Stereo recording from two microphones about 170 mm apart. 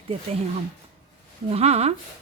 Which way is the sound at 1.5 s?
40° right (ahead or behind).